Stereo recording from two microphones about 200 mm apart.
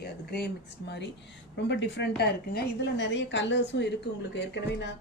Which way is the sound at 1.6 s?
65° left (ahead or behind).